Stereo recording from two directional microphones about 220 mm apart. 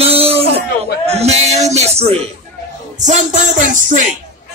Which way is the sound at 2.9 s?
35° right (ahead or behind).